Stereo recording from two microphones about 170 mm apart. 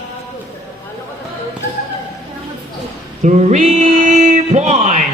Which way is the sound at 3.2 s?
45° right (ahead or behind).